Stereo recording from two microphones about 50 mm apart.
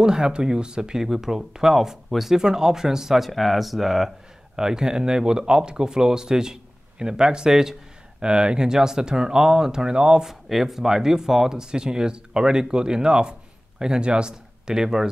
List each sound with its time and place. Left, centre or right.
0.0 s speech: centre
10.2 s speech: centre